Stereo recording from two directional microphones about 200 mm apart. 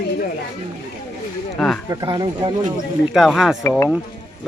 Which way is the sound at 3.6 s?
15° left (ahead or behind).